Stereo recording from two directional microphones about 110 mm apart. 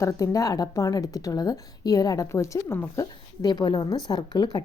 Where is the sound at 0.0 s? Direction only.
30° left (ahead or behind).